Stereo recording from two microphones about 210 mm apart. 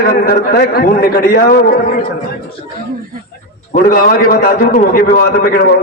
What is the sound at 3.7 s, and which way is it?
A man's voice, 45° left (ahead or behind).